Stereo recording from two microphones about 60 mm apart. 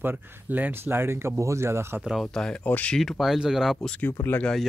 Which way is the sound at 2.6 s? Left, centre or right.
Left.